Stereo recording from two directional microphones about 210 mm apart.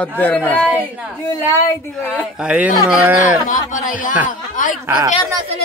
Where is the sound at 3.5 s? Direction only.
40° left (ahead or behind).